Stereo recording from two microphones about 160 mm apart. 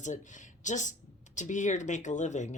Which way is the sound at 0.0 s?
50° left (ahead or behind).